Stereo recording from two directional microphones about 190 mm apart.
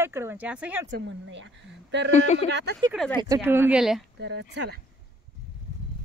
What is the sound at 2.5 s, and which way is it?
Speech, 60° right (ahead or behind).